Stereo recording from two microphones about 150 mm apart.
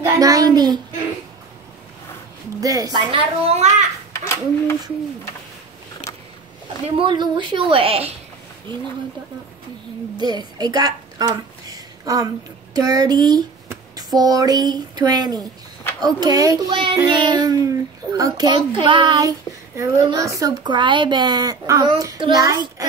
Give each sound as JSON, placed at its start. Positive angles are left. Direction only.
{"t": 0.0, "sound": "a child's voice", "side_deg": -25}
{"t": 2.6, "sound": "speech", "side_deg": -25}
{"t": 3.4, "sound": "a child's voice", "side_deg": -45}
{"t": 4.1, "sound": "a child's voice", "side_deg": 15}
{"t": 7.0, "sound": "a woman's voice", "side_deg": -35}
{"t": 10.1, "sound": "speech", "side_deg": -30}